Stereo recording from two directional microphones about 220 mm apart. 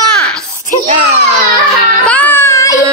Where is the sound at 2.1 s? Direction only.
10° left (ahead or behind).